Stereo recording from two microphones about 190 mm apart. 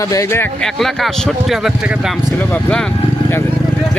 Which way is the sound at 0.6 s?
Centre (ahead or behind).